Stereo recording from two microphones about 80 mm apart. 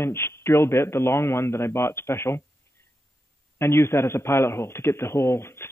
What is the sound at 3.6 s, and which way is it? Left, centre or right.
A man's voice, left.